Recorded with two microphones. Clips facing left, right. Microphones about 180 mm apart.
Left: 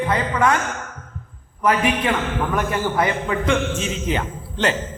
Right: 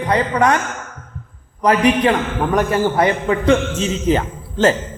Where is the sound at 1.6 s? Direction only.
40° right (ahead or behind).